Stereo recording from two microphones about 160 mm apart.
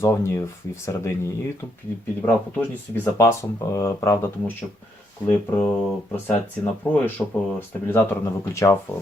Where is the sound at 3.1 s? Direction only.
20° left (ahead or behind).